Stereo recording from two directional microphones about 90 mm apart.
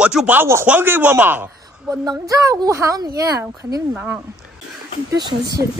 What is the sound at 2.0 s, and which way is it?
A woman's voice, 40° right (ahead or behind).